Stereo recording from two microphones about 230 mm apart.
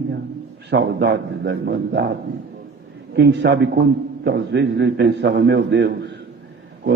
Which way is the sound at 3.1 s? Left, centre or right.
Right.